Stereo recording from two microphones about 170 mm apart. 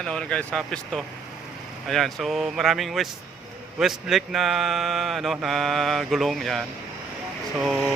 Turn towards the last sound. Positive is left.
turn(degrees=0)  # may be behind; listen again after turning